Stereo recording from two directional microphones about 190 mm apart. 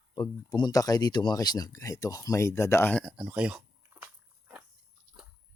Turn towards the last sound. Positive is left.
turn(degrees=-10)  # may be behind; listen again after turning